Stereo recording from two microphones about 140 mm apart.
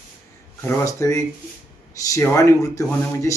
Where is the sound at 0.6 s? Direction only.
20° left (ahead or behind).